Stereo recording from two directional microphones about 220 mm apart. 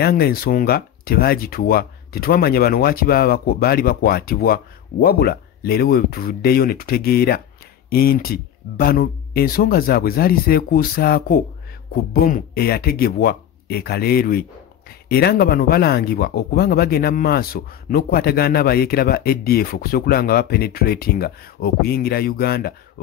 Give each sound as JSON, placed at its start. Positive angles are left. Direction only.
{"t": 0.0, "sound": "speech", "side_deg": 45}